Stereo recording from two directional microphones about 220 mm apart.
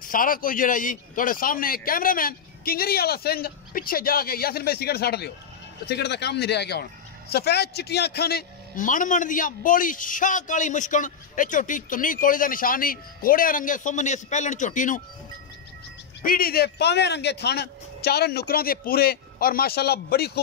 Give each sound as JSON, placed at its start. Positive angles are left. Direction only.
{"t": 0.0, "sound": "a man's voice", "side_deg": 40}
{"t": 16.2, "sound": "speech", "side_deg": 40}